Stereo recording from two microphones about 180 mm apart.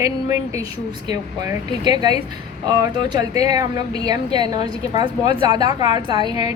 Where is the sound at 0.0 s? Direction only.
15° right (ahead or behind).